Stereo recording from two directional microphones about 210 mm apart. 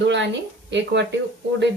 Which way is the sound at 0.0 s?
60° right (ahead or behind).